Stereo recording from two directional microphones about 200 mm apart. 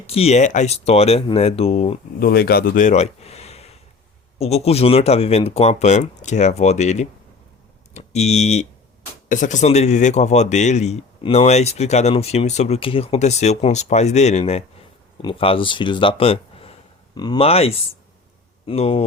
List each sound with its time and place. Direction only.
0.1 s speech: 30° left (ahead or behind)
2.1 s speech: 50° left (ahead or behind); by 19.0 s 30° left (ahead or behind)